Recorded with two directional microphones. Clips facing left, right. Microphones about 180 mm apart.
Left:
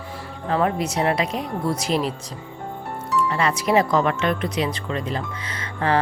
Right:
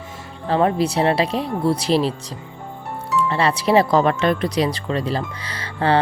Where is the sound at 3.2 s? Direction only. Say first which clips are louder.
Right 4 dB; 30° right (ahead or behind).